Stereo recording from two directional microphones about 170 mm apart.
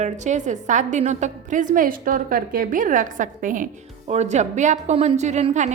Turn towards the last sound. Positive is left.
turn(degrees=-40)  # may be behind; listen again after turning